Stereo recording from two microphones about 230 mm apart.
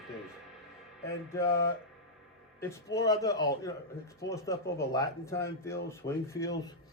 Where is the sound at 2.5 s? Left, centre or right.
Centre.